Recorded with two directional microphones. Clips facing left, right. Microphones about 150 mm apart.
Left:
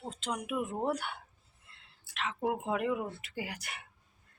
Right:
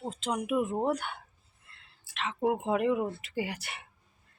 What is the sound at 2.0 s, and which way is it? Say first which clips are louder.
Speech: right 2 dB; centre (ahead or behind).